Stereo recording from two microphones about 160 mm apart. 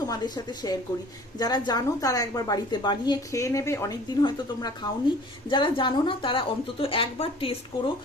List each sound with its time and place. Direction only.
0.1 s a woman's voice: 25° left (ahead or behind)